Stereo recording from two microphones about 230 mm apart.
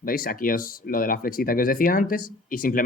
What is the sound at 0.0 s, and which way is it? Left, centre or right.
Speech, left.